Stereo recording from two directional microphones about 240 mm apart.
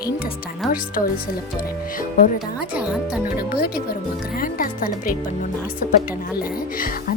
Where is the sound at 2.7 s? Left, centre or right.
Centre.